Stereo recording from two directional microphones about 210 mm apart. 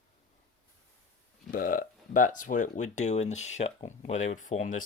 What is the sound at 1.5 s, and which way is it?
Speech, 40° left (ahead or behind).